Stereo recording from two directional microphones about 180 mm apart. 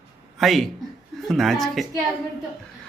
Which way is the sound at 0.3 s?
Centre (ahead or behind).